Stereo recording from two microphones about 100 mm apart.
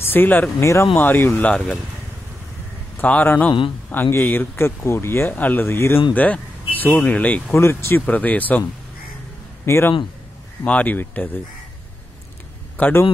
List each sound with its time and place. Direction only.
0.0 s speech: 20° left (ahead or behind)
3.0 s speech: 15° left (ahead or behind)
7.5 s speech: 25° left (ahead or behind)
9.7 s speech: 25° left (ahead or behind)
10.6 s speech: 15° left (ahead or behind)
12.7 s speech: 15° left (ahead or behind)